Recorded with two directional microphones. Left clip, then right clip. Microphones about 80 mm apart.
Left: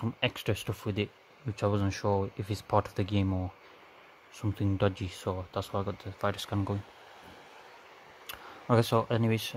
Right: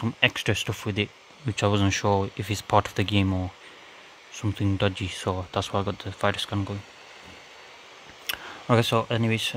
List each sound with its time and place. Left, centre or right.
0.0 s speech: centre
1.5 s speech: centre
4.4 s speech: centre
5.0 s speech: centre
5.3 s speech: right
6.3 s speech: centre
8.3 s a sound: right
8.6 s speech: centre